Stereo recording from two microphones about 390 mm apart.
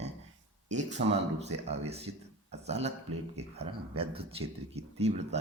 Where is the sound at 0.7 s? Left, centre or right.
Centre.